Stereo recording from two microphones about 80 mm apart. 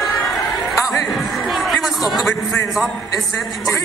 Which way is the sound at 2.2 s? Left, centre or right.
Centre.